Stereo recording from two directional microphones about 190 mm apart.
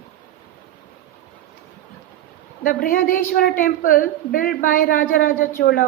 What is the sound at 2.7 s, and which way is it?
A woman's voice, 45° left (ahead or behind).